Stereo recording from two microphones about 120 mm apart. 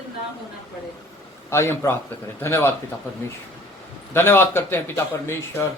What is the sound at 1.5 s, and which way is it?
A man's voice, 20° left (ahead or behind).